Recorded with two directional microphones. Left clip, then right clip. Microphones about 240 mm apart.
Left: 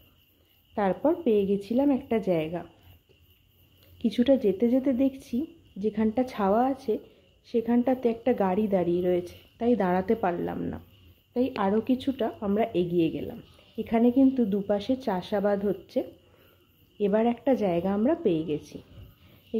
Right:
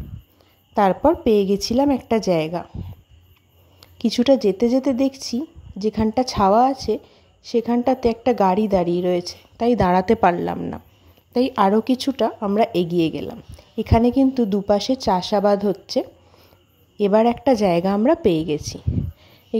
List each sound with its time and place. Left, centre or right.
0.7 s speech: right
3.8 s speech: right